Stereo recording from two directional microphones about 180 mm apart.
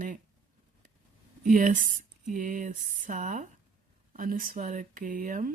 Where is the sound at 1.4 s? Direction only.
45° right (ahead or behind).